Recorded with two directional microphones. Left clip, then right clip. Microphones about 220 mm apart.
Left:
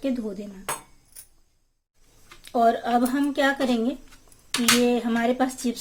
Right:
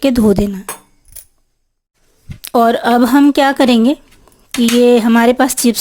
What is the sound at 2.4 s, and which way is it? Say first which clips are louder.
A woman's voice: right 9 dB; 50° right (ahead or behind).